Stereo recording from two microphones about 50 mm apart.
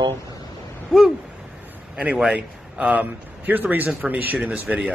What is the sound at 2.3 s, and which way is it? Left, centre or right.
A man's voice, right.